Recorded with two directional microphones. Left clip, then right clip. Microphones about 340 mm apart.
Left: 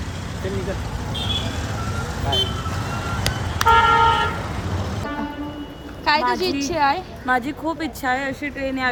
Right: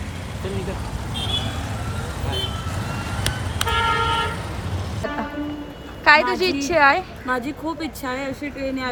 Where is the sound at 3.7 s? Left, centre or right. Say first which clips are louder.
Left 7 dB; left.